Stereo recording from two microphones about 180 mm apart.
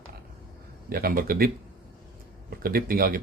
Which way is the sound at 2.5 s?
55° right (ahead or behind).